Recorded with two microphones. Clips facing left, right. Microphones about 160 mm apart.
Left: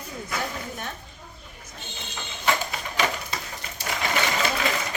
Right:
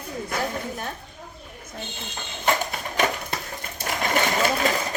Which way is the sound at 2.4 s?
50° right (ahead or behind).